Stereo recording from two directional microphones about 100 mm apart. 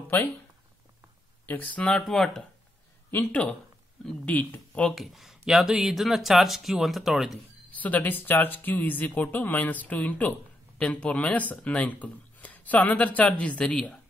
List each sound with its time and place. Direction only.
0.1 s speech: 20° left (ahead or behind)
1.4 s speech: 15° left (ahead or behind)
3.1 s speech: 20° left (ahead or behind)
4.9 s speech: centre (ahead or behind)
7.7 s speech: 15° left (ahead or behind)